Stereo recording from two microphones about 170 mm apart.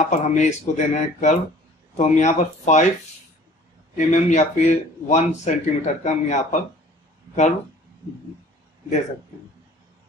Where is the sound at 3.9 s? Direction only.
45° left (ahead or behind).